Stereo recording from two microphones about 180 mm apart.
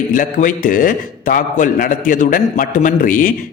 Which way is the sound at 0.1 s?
50° left (ahead or behind).